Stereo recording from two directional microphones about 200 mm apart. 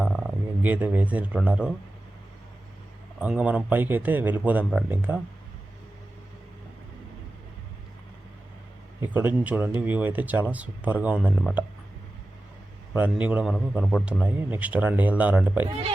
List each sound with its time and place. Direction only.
0.0 s speech: centre (ahead or behind)
3.2 s a man's voice: 5° right (ahead or behind)
9.0 s a man's voice: 10° right (ahead or behind)
12.9 s a man's voice: 5° right (ahead or behind)